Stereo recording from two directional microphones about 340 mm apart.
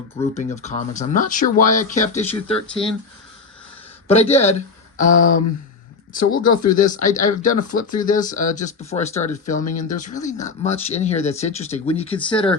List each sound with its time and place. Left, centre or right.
0.2 s speech: centre
4.1 s speech: centre
6.4 s speech: left
6.7 s speech: left